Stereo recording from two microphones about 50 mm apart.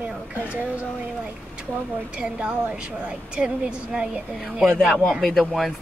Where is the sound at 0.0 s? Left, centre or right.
Right.